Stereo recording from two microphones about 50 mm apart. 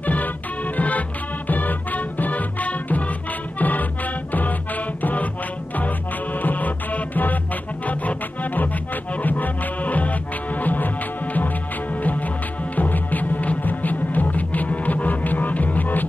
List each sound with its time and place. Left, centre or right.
0.0 s music: left